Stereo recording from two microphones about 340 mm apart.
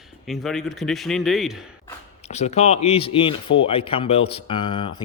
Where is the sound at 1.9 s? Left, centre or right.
Centre.